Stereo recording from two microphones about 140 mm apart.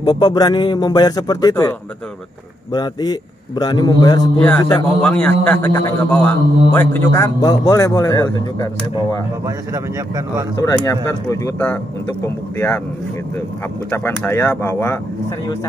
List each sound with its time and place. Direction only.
0.0 s a man's voice: 30° left (ahead or behind)
5.0 s a man's voice: 10° left (ahead or behind); by 9.2 s 25° left (ahead or behind)
9.9 s speech: 20° right (ahead or behind)
10.5 s a man's voice: 25° left (ahead or behind)
13.8 s speech: 15° left (ahead or behind)